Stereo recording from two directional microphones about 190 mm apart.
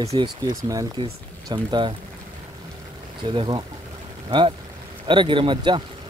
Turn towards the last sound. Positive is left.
turn(degrees=-25)  # may be behind; listen again after turning